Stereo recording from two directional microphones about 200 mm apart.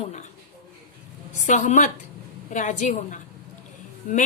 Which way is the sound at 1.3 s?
40° left (ahead or behind).